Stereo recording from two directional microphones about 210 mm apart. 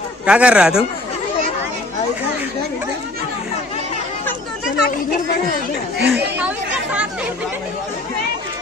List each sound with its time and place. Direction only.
0.3 s speech: 5° right (ahead or behind)
4.7 s chatter: 45° left (ahead or behind)
5.9 s speech: 50° right (ahead or behind)
6.3 s chatter: 5° right (ahead or behind)